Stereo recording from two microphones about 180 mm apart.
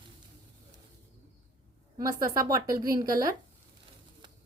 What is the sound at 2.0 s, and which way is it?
A woman's voice, 20° right (ahead or behind).